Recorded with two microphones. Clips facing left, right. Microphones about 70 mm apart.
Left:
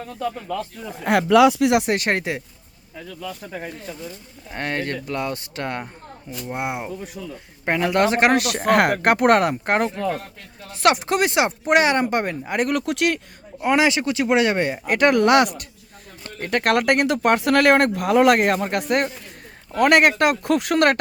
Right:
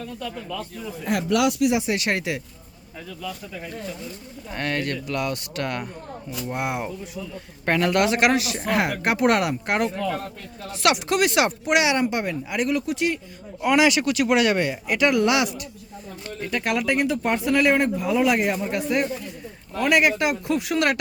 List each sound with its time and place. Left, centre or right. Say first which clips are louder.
0.4 s speech: left 3 dB; left
1.6 s speech: left 3 dB; left
2.0 s speech: left 2 dB; left
3.4 s speech: left 4 dB; left
4.5 s speech: left 1 dB; left
7.9 s speech: left 4 dB; left
8.4 s speech: left 6 dB; left
11.6 s speech: left 3 dB; left
12.7 s speech: left 2 dB; left
13.6 s speech: even; left
14.8 s speech: left 4 dB; left